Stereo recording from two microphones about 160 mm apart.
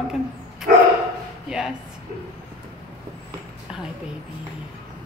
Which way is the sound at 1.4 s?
5° right (ahead or behind).